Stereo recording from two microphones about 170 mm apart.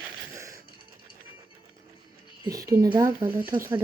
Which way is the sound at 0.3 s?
20° right (ahead or behind).